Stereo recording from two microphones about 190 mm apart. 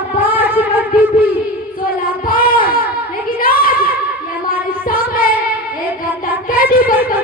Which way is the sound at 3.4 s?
50° left (ahead or behind).